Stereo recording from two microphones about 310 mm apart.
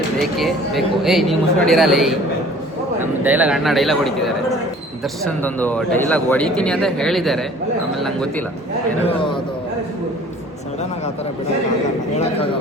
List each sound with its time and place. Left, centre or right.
0.2 s speech: centre
9.0 s a man's voice: centre
12.1 s speech: centre